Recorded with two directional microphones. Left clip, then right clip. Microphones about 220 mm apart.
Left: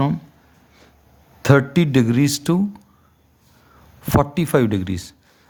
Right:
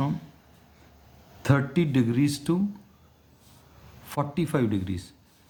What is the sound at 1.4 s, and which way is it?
Speech, 45° left (ahead or behind).